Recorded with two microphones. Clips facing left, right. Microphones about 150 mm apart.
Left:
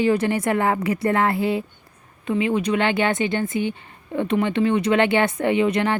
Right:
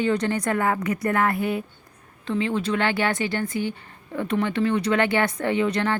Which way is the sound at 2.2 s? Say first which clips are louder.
Left 3 dB; 15° left (ahead or behind).